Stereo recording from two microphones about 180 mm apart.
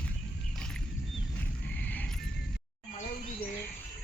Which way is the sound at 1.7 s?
10° left (ahead or behind).